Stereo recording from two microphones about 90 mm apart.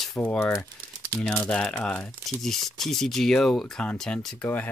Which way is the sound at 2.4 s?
5° left (ahead or behind).